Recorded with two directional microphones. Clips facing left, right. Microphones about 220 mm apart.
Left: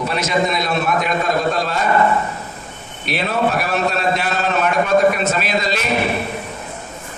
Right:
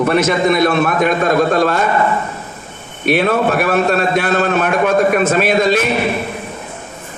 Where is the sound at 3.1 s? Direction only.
55° right (ahead or behind).